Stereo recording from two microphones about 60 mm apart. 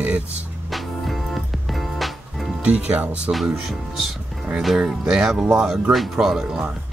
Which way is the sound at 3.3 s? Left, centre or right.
Centre.